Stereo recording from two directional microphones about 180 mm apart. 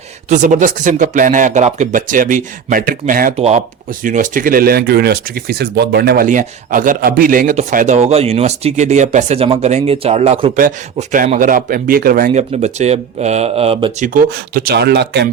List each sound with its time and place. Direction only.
0.3 s speech: 45° right (ahead or behind)
3.3 s speech: 35° right (ahead or behind)
4.0 s speech: 45° right (ahead or behind)
6.2 s speech: 45° right (ahead or behind)
10.6 s speech: 45° right (ahead or behind)
12.3 s speech: 40° right (ahead or behind)
14.1 s speech: 55° right (ahead or behind)